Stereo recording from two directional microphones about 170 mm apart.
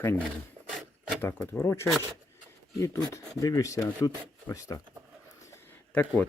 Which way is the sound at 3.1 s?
20° left (ahead or behind).